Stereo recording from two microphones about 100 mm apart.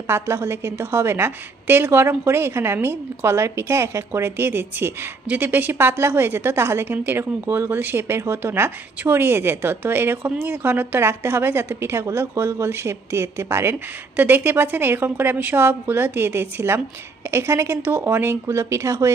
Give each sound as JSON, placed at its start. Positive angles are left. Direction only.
{"t": 0.1, "sound": "a woman's voice", "side_deg": -25}